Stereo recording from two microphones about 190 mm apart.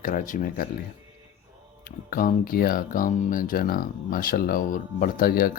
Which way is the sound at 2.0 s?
50° left (ahead or behind).